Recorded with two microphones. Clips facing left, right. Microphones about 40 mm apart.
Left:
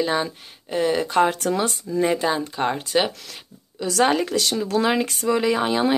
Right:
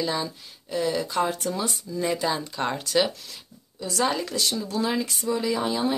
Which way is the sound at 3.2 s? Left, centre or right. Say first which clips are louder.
Left 3 dB; left.